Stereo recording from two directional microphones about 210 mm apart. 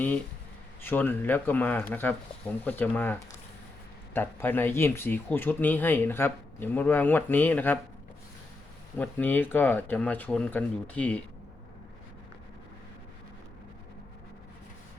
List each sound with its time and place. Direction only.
0.8 s speech: 10° left (ahead or behind)
9.0 s speech: 10° left (ahead or behind)